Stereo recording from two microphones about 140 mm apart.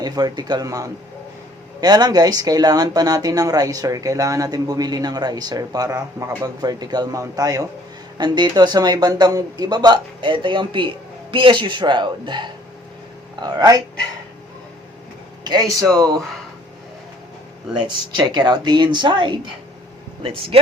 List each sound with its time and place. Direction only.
0.0 s speech: 30° right (ahead or behind)
17.7 s speech: 35° right (ahead or behind)